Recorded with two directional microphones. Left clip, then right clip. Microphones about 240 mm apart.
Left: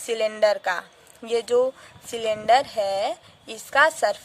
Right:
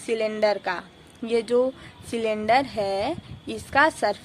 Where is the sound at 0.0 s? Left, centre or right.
Left.